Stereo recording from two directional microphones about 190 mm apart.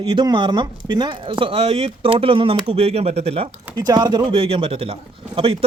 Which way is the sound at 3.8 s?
20° right (ahead or behind).